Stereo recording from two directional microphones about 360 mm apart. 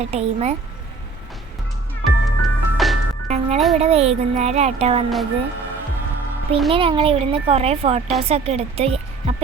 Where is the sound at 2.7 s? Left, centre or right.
Centre.